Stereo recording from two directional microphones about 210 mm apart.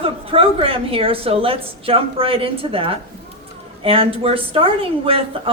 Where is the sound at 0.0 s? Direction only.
25° right (ahead or behind).